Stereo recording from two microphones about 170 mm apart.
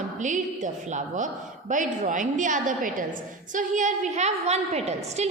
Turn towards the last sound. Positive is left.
turn(degrees=-40)  # may be behind; listen again after turning